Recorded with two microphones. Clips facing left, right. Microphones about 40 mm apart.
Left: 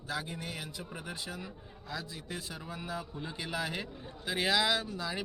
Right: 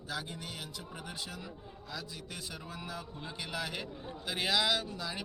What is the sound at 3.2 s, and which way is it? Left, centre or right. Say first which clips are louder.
A man's voice: left 1 dB; centre.